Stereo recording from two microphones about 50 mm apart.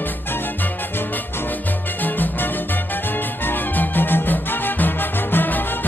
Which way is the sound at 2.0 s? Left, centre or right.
Left.